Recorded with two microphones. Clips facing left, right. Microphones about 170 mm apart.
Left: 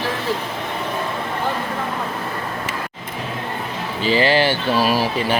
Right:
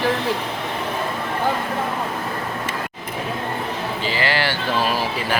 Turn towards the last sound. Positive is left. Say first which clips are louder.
# left 4 dB
turn(degrees=15)  # may be behind; listen again after turning